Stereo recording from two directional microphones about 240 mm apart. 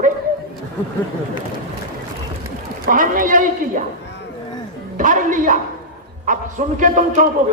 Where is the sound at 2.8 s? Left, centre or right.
Right.